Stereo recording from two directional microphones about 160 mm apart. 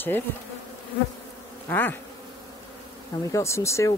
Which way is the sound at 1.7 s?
10° left (ahead or behind).